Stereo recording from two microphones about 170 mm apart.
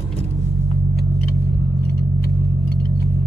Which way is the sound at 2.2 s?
65° left (ahead or behind).